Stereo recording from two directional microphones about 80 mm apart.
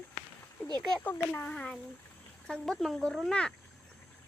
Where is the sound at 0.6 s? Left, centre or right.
Centre.